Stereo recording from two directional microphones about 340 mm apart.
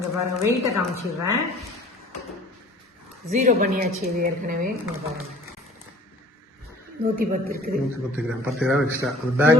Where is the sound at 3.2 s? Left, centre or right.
Right.